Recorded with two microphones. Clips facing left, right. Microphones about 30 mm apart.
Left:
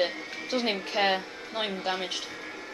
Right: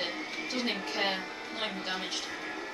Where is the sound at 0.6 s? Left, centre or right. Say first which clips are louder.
Left 5 dB; left.